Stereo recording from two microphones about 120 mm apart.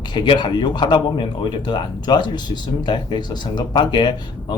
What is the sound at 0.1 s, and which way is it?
A man's voice, 40° left (ahead or behind).